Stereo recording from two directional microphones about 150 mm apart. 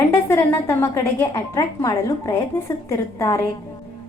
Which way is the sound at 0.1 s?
20° left (ahead or behind).